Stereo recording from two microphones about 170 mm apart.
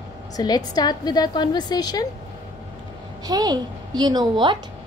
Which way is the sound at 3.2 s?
25° right (ahead or behind).